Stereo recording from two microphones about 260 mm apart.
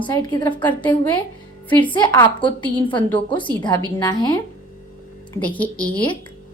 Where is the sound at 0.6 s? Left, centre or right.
Centre.